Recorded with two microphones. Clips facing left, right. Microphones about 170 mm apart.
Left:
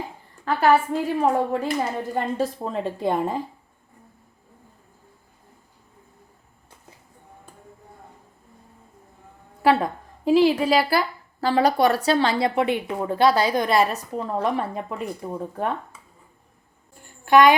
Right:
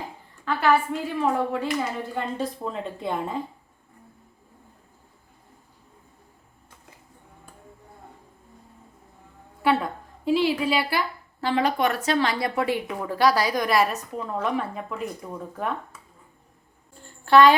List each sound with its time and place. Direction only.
0.4 s a woman's voice: 40° left (ahead or behind)
10.2 s a woman's voice: 40° left (ahead or behind)
16.9 s a sound: 15° left (ahead or behind)